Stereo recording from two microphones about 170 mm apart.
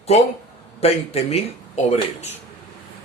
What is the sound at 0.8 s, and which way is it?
Speech, 35° left (ahead or behind).